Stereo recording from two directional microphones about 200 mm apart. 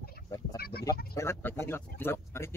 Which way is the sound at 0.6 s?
50° left (ahead or behind).